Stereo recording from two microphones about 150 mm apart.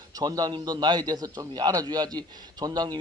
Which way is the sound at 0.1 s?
25° right (ahead or behind).